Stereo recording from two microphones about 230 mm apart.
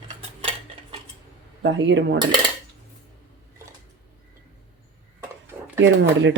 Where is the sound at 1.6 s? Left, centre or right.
Right.